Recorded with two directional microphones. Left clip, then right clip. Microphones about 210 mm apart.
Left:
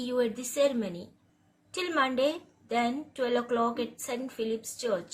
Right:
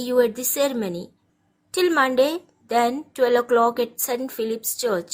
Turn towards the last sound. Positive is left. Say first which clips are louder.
# right 7 dB
turn(degrees=-55)  # may be behind; listen again after turning